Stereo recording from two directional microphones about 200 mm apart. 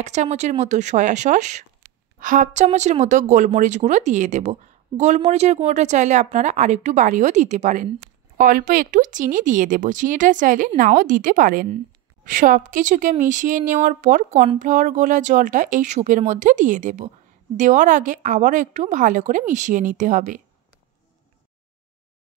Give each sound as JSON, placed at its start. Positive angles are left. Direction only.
{"t": 0.0, "sound": "a woman's voice", "side_deg": -35}